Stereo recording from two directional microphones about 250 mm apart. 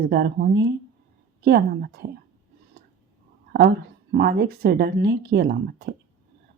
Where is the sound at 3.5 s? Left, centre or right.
Right.